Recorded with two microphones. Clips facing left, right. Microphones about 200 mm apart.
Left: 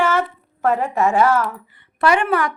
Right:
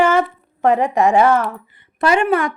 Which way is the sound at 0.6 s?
15° right (ahead or behind).